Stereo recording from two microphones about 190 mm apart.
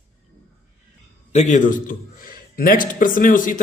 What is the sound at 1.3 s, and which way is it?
Speech, 40° left (ahead or behind).